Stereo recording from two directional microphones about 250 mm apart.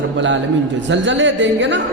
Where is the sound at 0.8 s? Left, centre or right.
Right.